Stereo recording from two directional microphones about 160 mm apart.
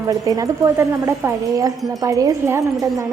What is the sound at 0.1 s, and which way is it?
A woman's voice, 20° right (ahead or behind).